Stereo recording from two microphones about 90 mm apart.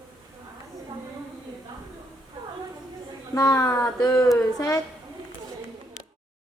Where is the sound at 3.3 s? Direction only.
40° left (ahead or behind).